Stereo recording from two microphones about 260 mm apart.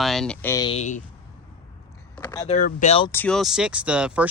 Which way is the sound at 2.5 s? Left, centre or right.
Left.